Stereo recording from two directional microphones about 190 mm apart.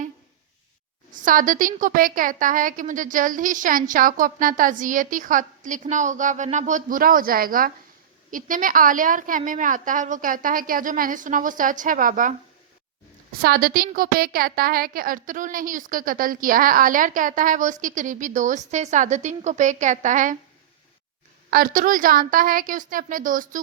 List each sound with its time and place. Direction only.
1.1 s a woman's voice: 45° right (ahead or behind)
13.3 s a woman's voice: 55° right (ahead or behind)
21.5 s a woman's voice: 50° right (ahead or behind)